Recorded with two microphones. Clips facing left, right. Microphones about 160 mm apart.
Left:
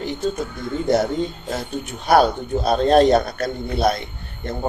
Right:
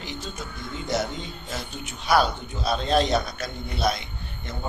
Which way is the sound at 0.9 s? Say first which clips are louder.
Left 9 dB; 50° left (ahead or behind).